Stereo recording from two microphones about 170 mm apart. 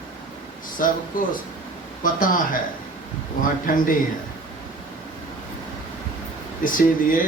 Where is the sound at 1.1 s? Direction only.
55° left (ahead or behind).